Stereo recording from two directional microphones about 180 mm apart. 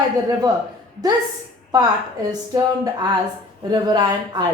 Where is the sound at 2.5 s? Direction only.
20° right (ahead or behind).